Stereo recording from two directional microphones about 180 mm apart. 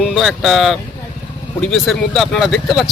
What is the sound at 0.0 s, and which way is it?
Speech, centre (ahead or behind).